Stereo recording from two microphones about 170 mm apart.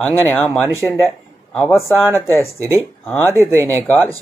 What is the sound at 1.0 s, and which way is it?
Speech, 5° left (ahead or behind).